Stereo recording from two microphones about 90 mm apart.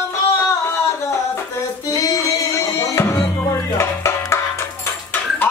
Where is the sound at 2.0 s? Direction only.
35° left (ahead or behind).